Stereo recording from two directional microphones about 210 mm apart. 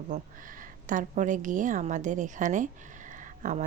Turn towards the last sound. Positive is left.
turn(degrees=-40)  # may be behind; listen again after turning